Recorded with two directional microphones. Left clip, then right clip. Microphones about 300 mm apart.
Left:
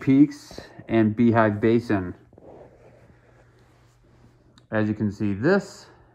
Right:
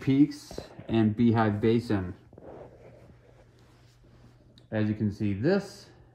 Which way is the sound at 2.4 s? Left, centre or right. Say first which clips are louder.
Even; centre.